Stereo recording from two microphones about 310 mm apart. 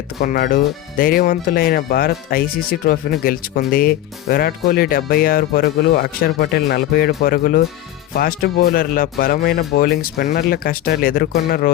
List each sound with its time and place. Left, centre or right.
0.2 s speech: left